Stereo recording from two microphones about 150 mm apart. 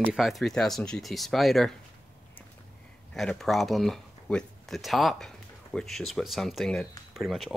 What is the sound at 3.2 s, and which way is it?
Speech, centre (ahead or behind).